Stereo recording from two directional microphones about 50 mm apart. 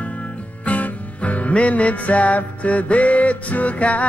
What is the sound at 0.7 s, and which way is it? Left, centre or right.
Music, left.